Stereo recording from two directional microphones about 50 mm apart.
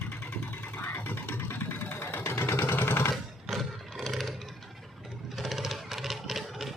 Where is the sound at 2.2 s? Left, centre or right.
Left.